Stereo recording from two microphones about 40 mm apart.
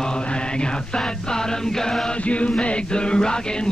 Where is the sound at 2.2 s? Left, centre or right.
Left.